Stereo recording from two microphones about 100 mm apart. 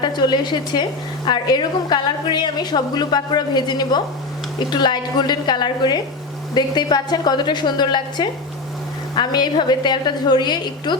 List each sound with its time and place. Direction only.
0.0 s a woman's voice: 50° left (ahead or behind)